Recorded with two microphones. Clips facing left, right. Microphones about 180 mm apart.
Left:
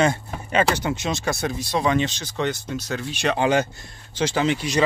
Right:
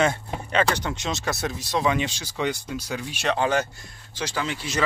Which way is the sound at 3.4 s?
20° left (ahead or behind).